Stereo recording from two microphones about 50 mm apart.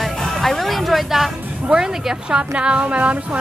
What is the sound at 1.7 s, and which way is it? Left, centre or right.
A woman's voice, centre.